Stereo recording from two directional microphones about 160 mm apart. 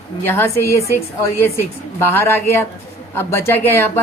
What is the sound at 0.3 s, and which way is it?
A woman's voice, 15° left (ahead or behind).